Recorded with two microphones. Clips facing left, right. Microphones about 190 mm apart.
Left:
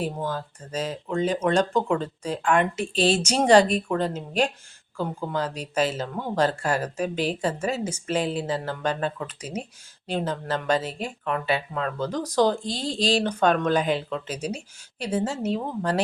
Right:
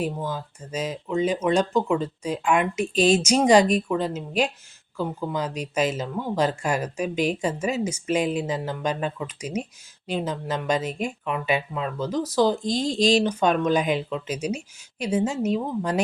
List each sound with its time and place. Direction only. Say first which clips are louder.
0.0 s speech: even; 10° right (ahead or behind)
12.6 s speech: right 5 dB; 40° right (ahead or behind)
13.1 s speech: right 1 dB; 10° right (ahead or behind)